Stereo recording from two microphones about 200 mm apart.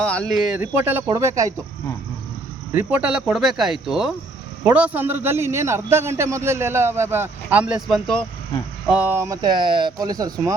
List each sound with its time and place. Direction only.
0.0 s a man's voice: 5° left (ahead or behind); by 1.5 s 15° right (ahead or behind)
2.7 s a man's voice: 5° right (ahead or behind)